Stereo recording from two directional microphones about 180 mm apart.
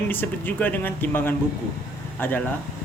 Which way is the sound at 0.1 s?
10° left (ahead or behind).